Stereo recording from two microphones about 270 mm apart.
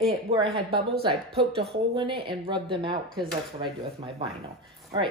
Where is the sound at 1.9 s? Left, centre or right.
Centre.